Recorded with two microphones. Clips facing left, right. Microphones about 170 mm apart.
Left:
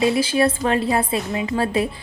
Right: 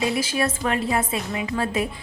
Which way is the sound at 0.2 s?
30° left (ahead or behind).